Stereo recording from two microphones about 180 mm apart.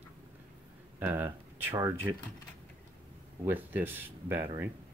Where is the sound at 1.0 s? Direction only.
10° right (ahead or behind).